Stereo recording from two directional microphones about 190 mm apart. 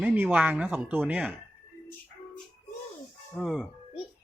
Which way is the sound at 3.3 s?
Centre (ahead or behind).